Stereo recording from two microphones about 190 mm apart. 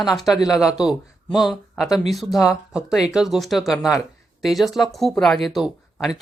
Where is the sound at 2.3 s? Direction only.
15° left (ahead or behind).